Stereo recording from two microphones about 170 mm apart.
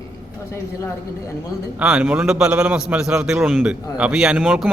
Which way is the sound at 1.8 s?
5° right (ahead or behind).